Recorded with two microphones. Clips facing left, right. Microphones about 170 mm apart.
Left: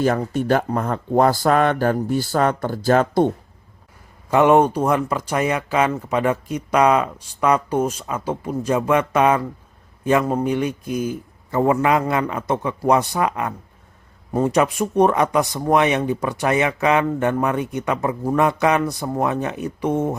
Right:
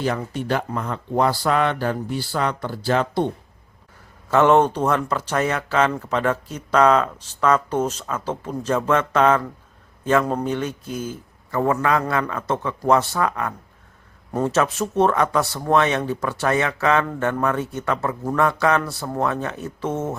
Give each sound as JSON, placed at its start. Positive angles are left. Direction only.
{"t": 0.0, "sound": "speech", "side_deg": 45}
{"t": 4.3, "sound": "speech", "side_deg": 10}